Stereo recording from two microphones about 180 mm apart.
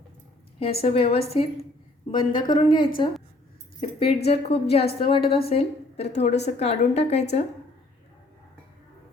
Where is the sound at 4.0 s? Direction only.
30° left (ahead or behind).